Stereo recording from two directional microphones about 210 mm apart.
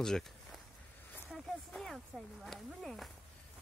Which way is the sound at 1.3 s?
Centre (ahead or behind).